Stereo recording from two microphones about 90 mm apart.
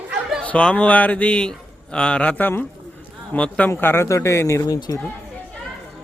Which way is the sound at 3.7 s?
25° left (ahead or behind).